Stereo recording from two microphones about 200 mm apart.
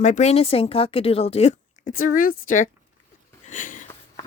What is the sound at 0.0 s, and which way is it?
A woman's voice, 35° left (ahead or behind).